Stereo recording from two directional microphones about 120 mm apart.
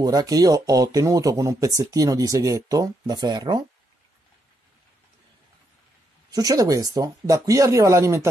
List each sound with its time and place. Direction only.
0.0 s speech: 30° right (ahead or behind)
6.3 s speech: 30° right (ahead or behind)